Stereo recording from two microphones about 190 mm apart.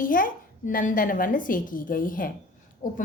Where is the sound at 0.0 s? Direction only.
45° left (ahead or behind).